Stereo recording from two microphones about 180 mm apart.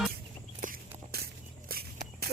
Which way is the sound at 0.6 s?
55° right (ahead or behind).